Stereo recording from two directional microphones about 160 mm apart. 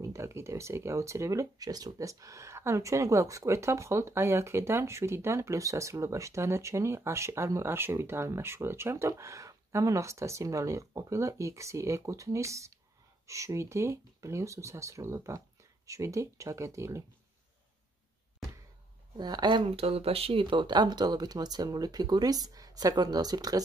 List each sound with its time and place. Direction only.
0.0 s speech: 20° right (ahead or behind)
19.1 s speech: 25° right (ahead or behind)